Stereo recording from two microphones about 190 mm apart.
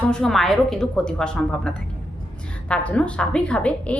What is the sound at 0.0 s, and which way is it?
A woman's voice, 5° left (ahead or behind).